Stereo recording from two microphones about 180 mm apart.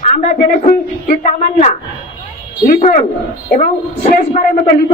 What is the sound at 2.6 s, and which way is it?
Speech, 45° left (ahead or behind).